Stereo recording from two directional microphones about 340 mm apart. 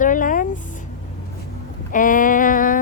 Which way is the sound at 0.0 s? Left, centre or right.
Left.